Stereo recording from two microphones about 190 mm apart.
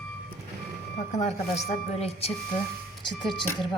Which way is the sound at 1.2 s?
35° left (ahead or behind).